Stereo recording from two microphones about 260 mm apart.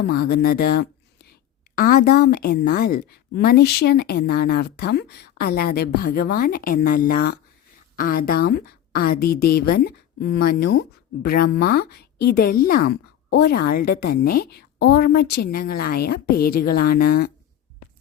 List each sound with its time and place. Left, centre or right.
0.1 s a woman's voice: left